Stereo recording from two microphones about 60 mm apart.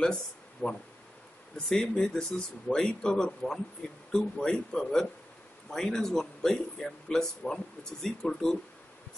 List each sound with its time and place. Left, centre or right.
0.0 s speech: centre